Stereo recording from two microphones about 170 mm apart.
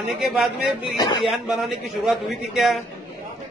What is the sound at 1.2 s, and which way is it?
A man's voice, centre (ahead or behind).